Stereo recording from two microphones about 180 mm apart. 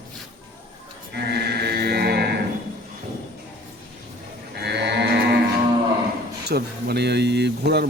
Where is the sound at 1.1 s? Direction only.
65° right (ahead or behind).